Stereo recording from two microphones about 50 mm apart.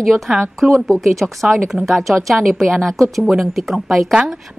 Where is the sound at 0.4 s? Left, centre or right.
Centre.